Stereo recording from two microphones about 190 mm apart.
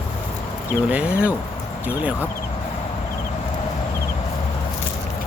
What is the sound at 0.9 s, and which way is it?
Speech, 5° right (ahead or behind).